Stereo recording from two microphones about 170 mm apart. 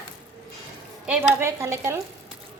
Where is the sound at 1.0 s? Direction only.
5° right (ahead or behind).